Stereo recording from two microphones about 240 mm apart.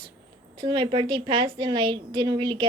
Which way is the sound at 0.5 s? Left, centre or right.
Centre.